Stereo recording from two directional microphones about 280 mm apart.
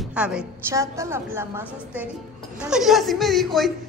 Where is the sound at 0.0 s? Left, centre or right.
Centre.